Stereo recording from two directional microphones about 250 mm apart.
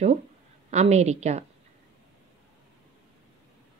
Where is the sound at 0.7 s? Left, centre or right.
Right.